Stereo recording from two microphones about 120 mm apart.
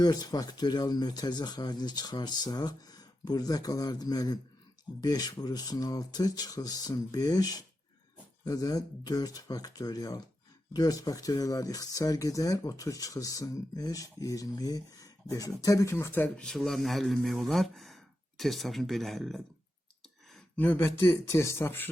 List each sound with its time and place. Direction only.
0.0 s speech: 35° left (ahead or behind); by 19.4 s centre (ahead or behind)
20.6 s speech: 15° left (ahead or behind)